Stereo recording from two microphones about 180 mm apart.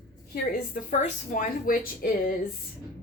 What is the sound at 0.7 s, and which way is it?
Speech, 45° left (ahead or behind).